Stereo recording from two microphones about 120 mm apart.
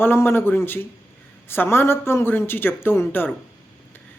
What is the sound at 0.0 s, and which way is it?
Speech, 20° left (ahead or behind).